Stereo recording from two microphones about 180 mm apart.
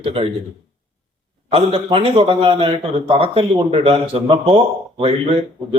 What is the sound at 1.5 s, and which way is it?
A man's voice, 30° right (ahead or behind).